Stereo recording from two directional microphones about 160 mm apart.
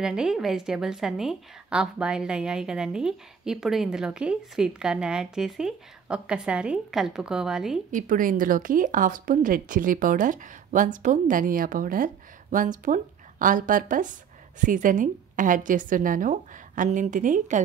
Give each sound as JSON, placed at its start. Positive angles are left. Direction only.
{"t": 0.0, "sound": "a woman's voice", "side_deg": -5}
{"t": 7.9, "sound": "speech", "side_deg": -55}